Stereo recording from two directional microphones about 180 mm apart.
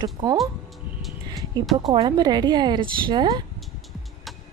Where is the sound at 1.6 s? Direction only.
Centre (ahead or behind).